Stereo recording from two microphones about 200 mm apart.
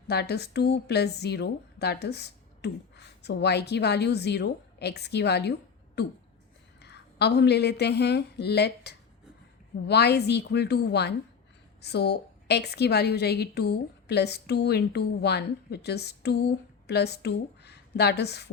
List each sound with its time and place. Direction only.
0.1 s a woman's voice: 55° left (ahead or behind)